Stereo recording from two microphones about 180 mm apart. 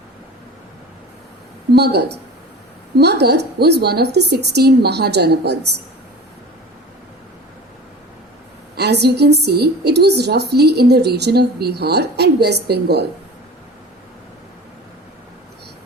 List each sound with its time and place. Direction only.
1.7 s a woman's voice: 65° right (ahead or behind)
8.7 s a woman's voice: 65° right (ahead or behind)